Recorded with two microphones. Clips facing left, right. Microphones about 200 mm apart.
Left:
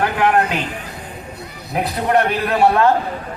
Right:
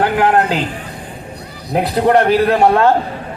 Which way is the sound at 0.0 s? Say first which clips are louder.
Right 3 dB; 35° right (ahead or behind).